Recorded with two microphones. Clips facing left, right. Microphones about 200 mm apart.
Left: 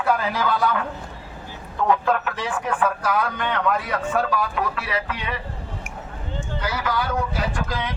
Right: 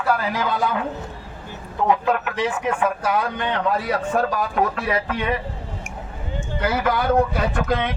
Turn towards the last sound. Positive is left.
turn(degrees=-55)  # may be behind; listen again after turning